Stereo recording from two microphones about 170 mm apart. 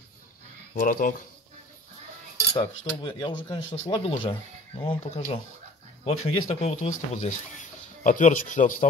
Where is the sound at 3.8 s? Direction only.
30° left (ahead or behind).